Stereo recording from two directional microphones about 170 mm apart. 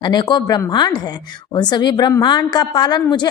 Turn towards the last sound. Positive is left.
turn(degrees=25)  # may be behind; listen again after turning